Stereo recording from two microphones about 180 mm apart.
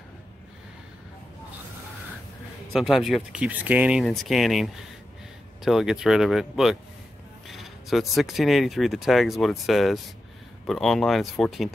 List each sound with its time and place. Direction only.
2.7 s speech: centre (ahead or behind)